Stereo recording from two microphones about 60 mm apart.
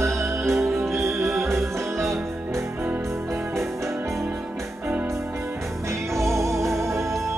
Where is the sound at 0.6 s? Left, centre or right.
Centre.